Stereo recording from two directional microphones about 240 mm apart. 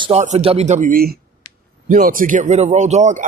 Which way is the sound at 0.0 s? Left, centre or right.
Right.